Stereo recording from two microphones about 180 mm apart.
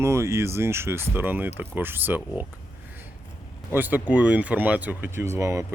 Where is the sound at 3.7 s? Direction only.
10° right (ahead or behind).